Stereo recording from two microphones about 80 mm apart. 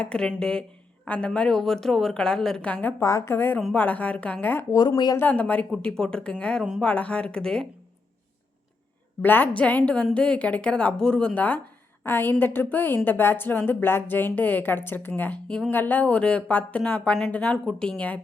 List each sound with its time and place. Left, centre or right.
0.0 s a woman's voice: centre
2.6 s a woman's voice: centre
3.0 s a woman's voice: left; by 7.7 s centre
9.2 s a woman's voice: left